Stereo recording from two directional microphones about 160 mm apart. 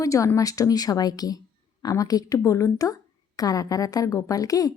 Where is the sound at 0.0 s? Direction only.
20° left (ahead or behind).